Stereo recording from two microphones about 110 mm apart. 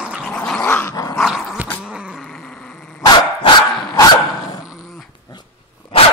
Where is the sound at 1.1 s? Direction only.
Centre (ahead or behind).